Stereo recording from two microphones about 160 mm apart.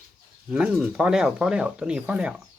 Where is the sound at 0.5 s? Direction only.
5° right (ahead or behind).